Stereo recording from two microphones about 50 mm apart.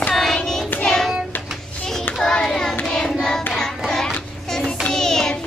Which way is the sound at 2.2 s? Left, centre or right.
Centre.